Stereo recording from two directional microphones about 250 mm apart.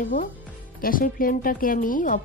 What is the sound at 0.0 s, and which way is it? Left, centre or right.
A woman's voice, left.